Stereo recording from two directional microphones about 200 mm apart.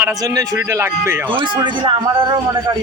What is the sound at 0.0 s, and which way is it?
Speech, 20° right (ahead or behind).